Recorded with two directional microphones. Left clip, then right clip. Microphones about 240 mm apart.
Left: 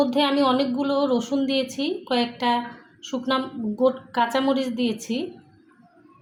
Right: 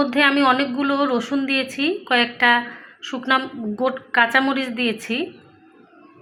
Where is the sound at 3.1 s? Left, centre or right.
Right.